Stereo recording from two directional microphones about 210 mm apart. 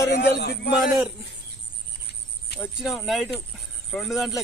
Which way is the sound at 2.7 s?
Centre (ahead or behind).